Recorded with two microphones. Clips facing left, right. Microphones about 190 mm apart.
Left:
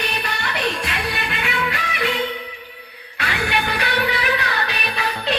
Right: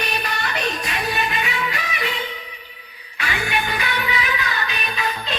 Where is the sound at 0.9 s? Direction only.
65° left (ahead or behind).